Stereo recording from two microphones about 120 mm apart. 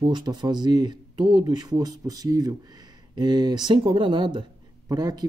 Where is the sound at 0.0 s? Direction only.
40° right (ahead or behind).